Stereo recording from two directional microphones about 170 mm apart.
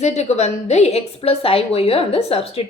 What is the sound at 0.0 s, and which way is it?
A woman's voice, 40° left (ahead or behind).